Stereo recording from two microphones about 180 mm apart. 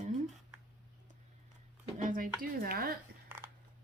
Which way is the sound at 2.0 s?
50° right (ahead or behind).